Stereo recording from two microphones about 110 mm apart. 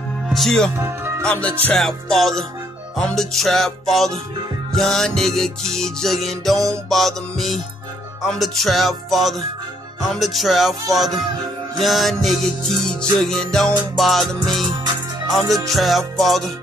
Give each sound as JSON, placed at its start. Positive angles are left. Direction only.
{"t": 0.3, "sound": "music", "side_deg": 5}
{"t": 0.7, "sound": "speech", "side_deg": -20}
{"t": 1.2, "sound": "music", "side_deg": 10}